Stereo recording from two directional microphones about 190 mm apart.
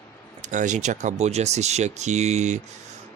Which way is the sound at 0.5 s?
40° right (ahead or behind).